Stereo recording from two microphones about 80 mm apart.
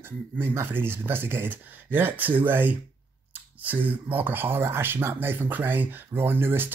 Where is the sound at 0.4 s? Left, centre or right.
Right.